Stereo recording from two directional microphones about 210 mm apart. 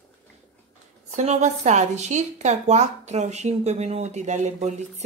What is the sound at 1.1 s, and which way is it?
A woman's voice, 35° right (ahead or behind).